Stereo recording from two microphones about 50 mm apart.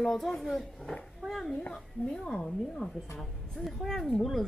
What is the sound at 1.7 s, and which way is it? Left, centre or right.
A woman's voice, centre.